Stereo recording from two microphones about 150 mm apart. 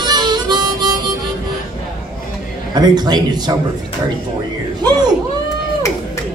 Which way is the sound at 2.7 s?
30° right (ahead or behind).